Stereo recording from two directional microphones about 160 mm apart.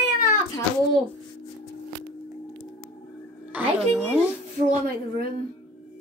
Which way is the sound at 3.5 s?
10° right (ahead or behind).